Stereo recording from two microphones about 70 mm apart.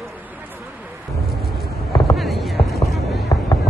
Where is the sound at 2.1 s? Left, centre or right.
Centre.